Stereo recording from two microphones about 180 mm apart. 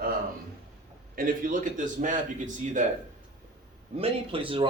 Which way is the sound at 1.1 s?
45° right (ahead or behind).